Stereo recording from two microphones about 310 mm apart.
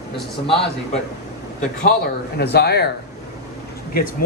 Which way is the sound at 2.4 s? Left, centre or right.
Left.